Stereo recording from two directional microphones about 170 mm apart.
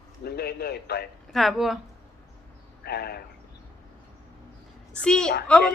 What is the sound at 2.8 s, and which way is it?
Speech, 70° left (ahead or behind).